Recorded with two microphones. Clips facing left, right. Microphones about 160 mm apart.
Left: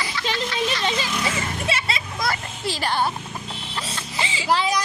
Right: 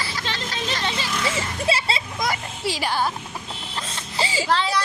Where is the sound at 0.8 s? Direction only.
15° left (ahead or behind).